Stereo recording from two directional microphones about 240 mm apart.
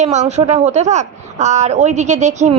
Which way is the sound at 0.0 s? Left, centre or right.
Right.